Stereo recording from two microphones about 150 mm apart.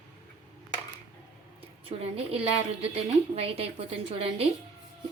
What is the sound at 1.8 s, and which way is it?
A woman's voice, 40° right (ahead or behind).